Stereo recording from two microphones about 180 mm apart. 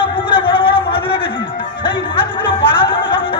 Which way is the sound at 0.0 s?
30° left (ahead or behind).